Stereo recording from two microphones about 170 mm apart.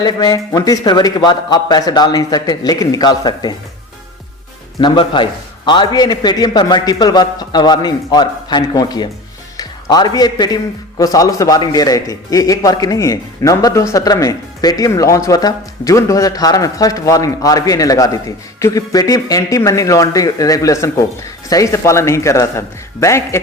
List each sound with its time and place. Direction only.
0.0 s a man's voice: 25° left (ahead or behind)
4.8 s a man's voice: 30° left (ahead or behind)